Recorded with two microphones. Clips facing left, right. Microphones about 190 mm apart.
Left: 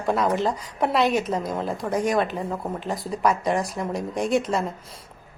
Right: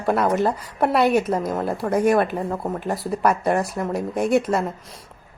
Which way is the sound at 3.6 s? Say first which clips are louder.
Right 3 dB; 5° right (ahead or behind).